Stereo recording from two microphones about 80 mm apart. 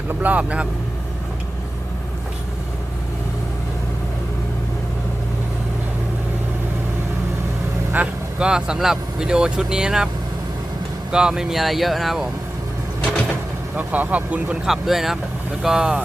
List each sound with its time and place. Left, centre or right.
0.1 s speech: right
7.9 s speech: centre
11.1 s speech: centre
13.7 s speech: centre